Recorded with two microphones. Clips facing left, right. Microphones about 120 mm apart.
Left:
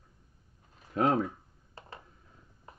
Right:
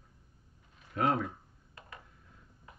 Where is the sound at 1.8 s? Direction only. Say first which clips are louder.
Left 3 dB; 30° left (ahead or behind).